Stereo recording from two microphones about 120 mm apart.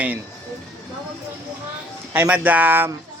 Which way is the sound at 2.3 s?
15° right (ahead or behind).